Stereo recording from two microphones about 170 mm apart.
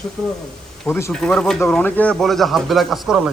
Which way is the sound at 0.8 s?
10° left (ahead or behind).